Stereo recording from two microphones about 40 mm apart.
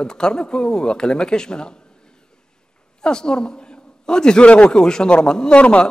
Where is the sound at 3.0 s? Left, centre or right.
Centre.